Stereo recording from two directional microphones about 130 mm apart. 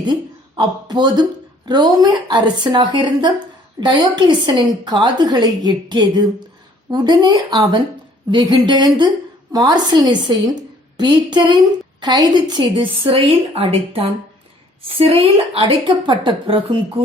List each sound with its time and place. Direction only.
0.1 s a woman's voice: 35° right (ahead or behind)